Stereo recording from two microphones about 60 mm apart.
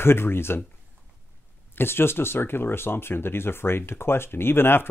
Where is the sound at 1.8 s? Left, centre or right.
Left.